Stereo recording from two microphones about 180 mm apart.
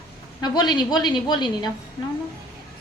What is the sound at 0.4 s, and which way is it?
A woman's voice, 25° left (ahead or behind).